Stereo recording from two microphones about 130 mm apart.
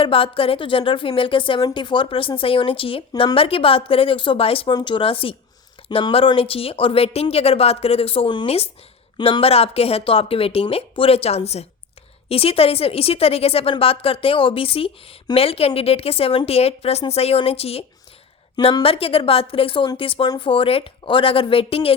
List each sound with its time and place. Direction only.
0.0 s speech: 45° left (ahead or behind)
4.7 s speech: 35° left (ahead or behind)